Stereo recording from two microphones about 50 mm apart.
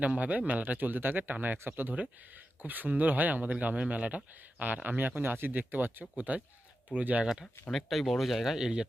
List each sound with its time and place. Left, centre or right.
0.0 s speech: right
7.7 s speech: centre